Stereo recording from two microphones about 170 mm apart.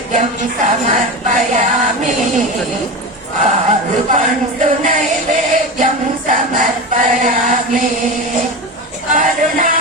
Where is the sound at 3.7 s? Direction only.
45° right (ahead or behind).